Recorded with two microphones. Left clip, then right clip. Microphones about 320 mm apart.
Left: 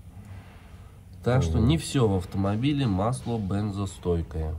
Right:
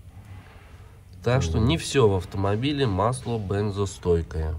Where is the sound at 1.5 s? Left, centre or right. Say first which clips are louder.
Right 2 dB; right.